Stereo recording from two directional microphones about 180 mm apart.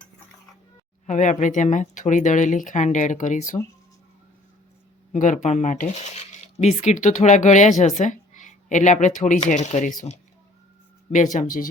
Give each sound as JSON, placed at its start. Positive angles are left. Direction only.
{"t": 1.0, "sound": "speech", "side_deg": 40}
{"t": 5.1, "sound": "speech", "side_deg": 45}